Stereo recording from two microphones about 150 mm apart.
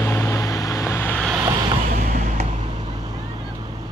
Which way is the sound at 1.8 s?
60° right (ahead or behind).